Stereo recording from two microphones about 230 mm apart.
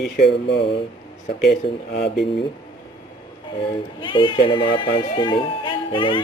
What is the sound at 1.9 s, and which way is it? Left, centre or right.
Speech, left.